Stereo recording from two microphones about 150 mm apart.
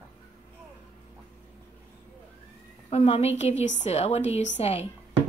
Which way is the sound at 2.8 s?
45° left (ahead or behind).